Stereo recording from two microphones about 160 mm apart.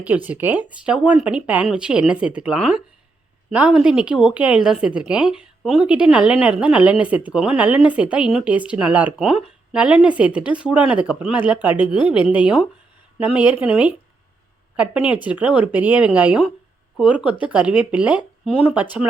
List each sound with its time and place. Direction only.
0.3 s a woman's voice: 10° right (ahead or behind)
15.0 s a woman's voice: 10° right (ahead or behind)